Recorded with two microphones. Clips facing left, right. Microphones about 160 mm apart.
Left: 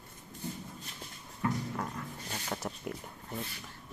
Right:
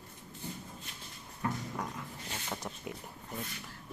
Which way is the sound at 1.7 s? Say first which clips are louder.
Left 2 dB; centre (ahead or behind).